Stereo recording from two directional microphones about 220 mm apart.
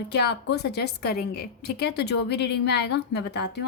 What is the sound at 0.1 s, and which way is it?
A woman's voice, 50° left (ahead or behind).